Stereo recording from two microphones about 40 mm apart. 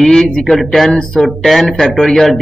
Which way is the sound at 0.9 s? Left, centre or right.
Centre.